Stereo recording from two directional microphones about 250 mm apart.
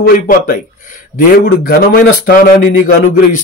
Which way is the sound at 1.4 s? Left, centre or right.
Left.